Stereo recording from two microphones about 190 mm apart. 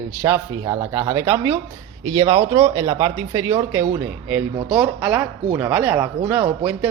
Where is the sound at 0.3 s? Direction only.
20° right (ahead or behind).